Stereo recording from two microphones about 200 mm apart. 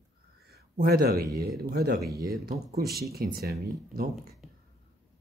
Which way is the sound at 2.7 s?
50° right (ahead or behind).